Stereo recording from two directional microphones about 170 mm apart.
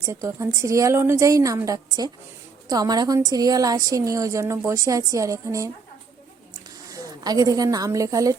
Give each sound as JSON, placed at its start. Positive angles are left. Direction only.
{"t": 0.0, "sound": "a woman's voice", "side_deg": -15}
{"t": 6.9, "sound": "a woman's voice", "side_deg": -20}